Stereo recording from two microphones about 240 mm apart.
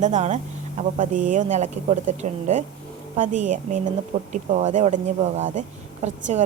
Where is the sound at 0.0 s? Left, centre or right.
Right.